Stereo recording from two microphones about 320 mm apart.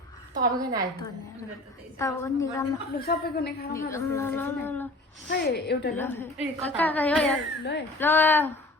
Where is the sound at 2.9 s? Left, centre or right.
Left.